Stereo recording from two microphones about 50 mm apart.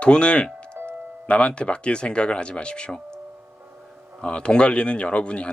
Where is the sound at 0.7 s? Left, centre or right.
Right.